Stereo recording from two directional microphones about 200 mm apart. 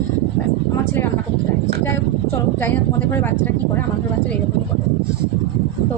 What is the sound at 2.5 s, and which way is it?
Speech, 10° left (ahead or behind).